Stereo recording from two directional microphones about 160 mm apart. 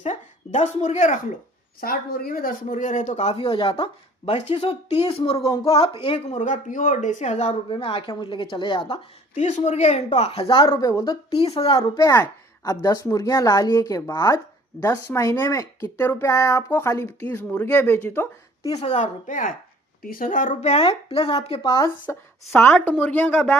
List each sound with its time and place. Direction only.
0.0 s speech: 45° left (ahead or behind)
1.8 s a woman's voice: 65° left (ahead or behind); by 7.5 s 50° left (ahead or behind)
7.7 s a woman's voice: 35° left (ahead or behind)
10.8 s a woman's voice: 20° left (ahead or behind)
11.3 s a woman's voice: 35° left (ahead or behind)
11.8 s a woman's voice: 20° left (ahead or behind)
18.7 s a woman's voice: 40° left (ahead or behind)
22.0 s speech: 10° left (ahead or behind)